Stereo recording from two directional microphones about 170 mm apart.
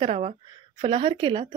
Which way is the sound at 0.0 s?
40° right (ahead or behind).